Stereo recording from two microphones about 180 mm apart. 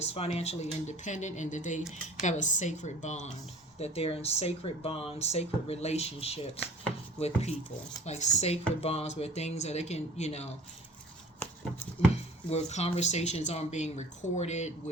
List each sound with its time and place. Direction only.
0.0 s speech: 35° left (ahead or behind)
12.5 s speech: 35° left (ahead or behind)